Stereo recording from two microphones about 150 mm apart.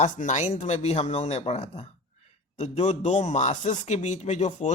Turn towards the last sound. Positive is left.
turn(degrees=50)  # may be behind; listen again after turning